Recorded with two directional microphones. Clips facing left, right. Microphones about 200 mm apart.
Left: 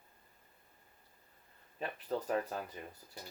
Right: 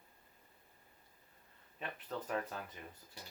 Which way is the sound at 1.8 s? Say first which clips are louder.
Left 6 dB; 35° left (ahead or behind).